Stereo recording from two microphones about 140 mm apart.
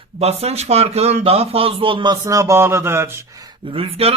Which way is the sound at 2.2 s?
25° right (ahead or behind).